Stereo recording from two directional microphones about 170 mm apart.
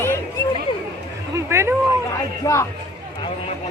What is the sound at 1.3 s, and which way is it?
Speech, 15° right (ahead or behind).